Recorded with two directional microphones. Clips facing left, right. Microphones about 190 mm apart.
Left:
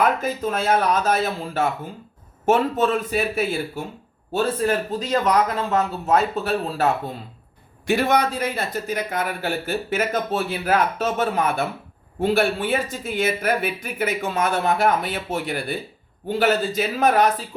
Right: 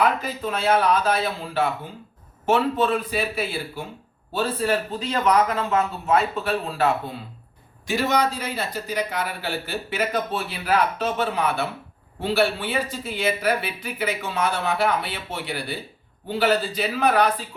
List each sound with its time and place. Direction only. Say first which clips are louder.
0.0 s a man's voice: left 2 dB; 45° left (ahead or behind)
7.9 s a man's voice: left 3 dB; 55° left (ahead or behind)